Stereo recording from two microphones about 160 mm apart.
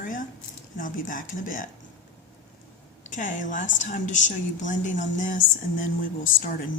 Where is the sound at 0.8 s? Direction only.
55° left (ahead or behind).